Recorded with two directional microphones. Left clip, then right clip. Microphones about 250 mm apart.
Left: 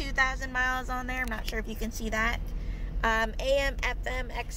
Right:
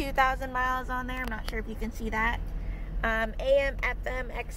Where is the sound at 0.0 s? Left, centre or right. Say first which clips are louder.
Right 2 dB; right.